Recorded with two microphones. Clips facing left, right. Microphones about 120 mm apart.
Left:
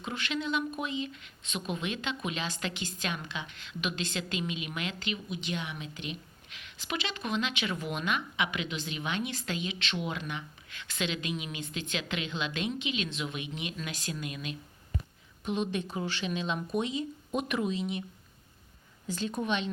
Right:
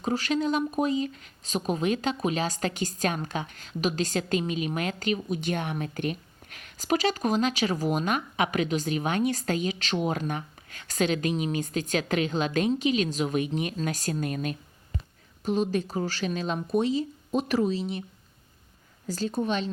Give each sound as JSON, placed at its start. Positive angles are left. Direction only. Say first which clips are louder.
{"t": 0.0, "sound": "speech", "louder": "right 8 dB", "side_deg": -40}
{"t": 19.0, "sound": "speech", "louder": "right 4 dB", "side_deg": -40}